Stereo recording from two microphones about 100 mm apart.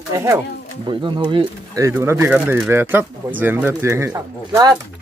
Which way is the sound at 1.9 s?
25° right (ahead or behind).